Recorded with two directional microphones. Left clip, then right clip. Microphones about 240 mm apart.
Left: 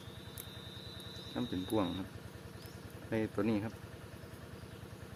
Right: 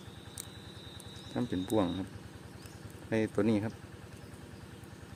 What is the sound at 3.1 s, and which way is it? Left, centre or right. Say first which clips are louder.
Speech: right 5 dB; right.